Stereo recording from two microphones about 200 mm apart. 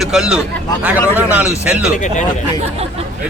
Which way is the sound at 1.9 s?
35° left (ahead or behind).